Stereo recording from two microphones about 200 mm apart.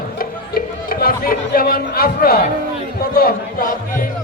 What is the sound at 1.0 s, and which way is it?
Speech, 45° left (ahead or behind).